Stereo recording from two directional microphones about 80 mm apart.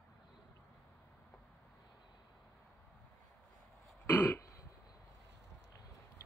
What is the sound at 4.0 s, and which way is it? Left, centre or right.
Throat clearing, left.